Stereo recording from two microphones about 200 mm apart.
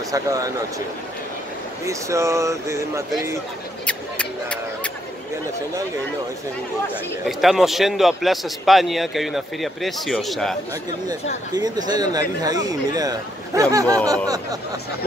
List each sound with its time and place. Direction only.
0.1 s speech: 15° right (ahead or behind)
1.9 s speech: 15° right (ahead or behind)
3.8 s a sound: 5° left (ahead or behind)
7.2 s a man's voice: centre (ahead or behind)
11.5 s speech: 20° right (ahead or behind)